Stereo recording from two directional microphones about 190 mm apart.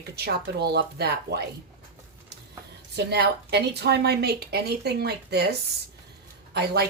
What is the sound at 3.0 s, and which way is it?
Speech, 60° right (ahead or behind).